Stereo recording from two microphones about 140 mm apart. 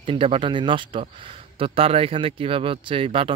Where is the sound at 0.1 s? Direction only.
40° right (ahead or behind).